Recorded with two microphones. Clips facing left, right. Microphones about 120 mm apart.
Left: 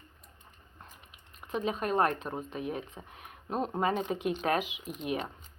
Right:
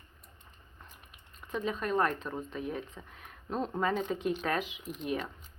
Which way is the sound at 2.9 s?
15° left (ahead or behind).